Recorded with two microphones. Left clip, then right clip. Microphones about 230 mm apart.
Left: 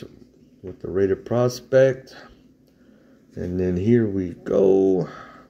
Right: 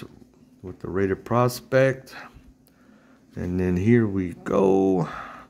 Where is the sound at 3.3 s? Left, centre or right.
Right.